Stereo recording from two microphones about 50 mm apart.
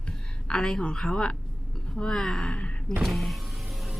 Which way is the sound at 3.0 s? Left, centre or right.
Centre.